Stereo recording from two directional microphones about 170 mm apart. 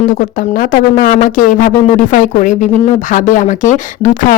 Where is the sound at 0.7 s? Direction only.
50° left (ahead or behind).